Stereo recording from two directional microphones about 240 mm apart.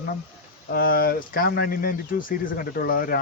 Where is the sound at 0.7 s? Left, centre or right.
Left.